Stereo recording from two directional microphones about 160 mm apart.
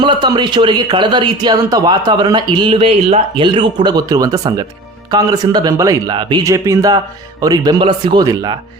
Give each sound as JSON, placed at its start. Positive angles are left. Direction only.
{"t": 0.0, "sound": "speech", "side_deg": -30}